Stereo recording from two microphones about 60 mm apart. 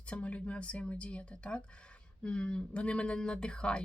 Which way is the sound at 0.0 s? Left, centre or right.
Left.